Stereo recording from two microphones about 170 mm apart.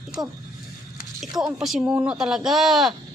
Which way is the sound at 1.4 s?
5° right (ahead or behind).